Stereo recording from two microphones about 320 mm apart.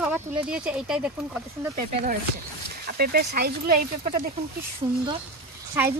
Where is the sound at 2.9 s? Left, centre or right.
Right.